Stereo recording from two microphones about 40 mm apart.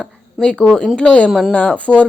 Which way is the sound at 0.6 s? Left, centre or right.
Centre.